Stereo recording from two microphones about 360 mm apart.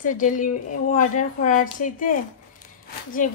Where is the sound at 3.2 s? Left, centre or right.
Left.